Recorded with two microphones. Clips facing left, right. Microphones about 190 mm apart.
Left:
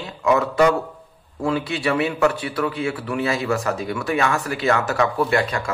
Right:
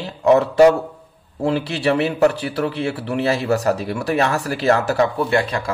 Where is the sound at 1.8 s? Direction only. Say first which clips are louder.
Right 4 dB; 35° right (ahead or behind).